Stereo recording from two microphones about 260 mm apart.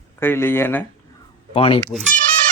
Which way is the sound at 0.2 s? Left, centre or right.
Centre.